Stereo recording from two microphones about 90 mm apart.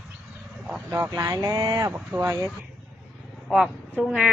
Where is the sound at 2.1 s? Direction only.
15° right (ahead or behind).